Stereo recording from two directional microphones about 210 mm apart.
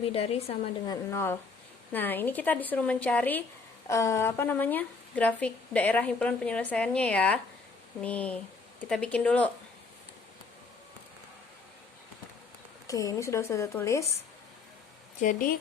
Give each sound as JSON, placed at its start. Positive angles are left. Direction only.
{"t": 0.0, "sound": "a woman's voice", "side_deg": 30}
{"t": 1.1, "sound": "speech", "side_deg": 10}
{"t": 12.9, "sound": "speech", "side_deg": 15}
{"t": 15.2, "sound": "speech", "side_deg": 40}